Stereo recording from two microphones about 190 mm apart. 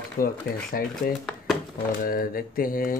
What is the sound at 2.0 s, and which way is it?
Speech, 50° left (ahead or behind).